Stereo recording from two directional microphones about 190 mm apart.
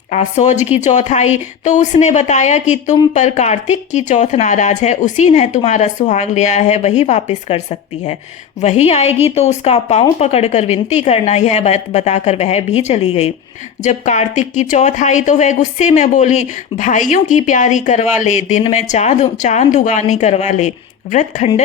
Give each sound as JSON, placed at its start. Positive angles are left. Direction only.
{"t": 0.1, "sound": "speech", "side_deg": 40}